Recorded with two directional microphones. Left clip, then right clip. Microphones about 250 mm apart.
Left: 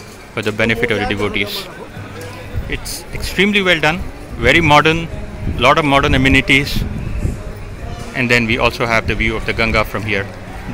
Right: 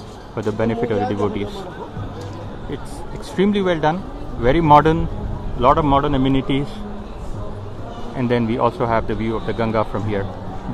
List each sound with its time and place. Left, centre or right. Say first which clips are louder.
0.4 s a man's voice: left 5 dB; centre
3.4 s a man's voice: left 5 dB; centre
8.2 s a man's voice: left 5 dB; centre